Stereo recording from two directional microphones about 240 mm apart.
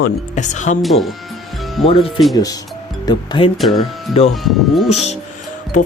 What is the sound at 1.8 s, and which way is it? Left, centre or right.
Speech, left.